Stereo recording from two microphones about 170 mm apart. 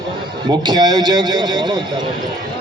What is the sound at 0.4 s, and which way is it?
A man's voice, 25° right (ahead or behind).